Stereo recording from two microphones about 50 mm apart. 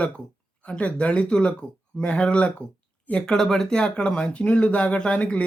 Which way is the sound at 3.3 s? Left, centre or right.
Centre.